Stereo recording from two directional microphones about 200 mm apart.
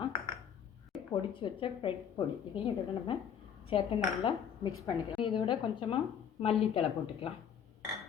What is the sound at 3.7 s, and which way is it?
A woman's voice, 30° left (ahead or behind).